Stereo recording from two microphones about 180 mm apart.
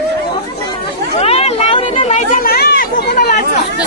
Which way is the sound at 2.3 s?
55° left (ahead or behind).